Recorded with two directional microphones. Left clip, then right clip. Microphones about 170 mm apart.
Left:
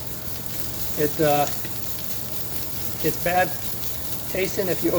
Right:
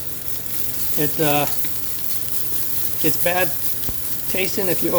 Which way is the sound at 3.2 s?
55° right (ahead or behind).